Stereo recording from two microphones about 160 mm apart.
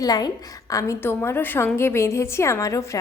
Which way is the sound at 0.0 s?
25° left (ahead or behind).